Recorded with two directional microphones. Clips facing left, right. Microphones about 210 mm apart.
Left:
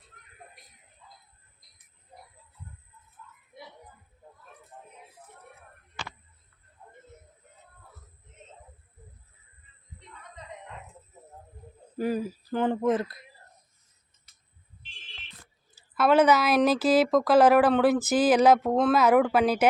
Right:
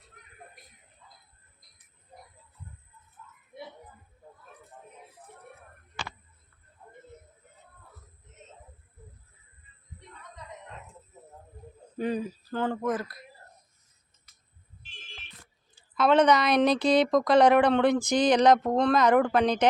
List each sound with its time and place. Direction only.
11.9 s speech: 5° left (ahead or behind); by 13.2 s 25° left (ahead or behind)
15.7 s a woman's voice: 5° left (ahead or behind)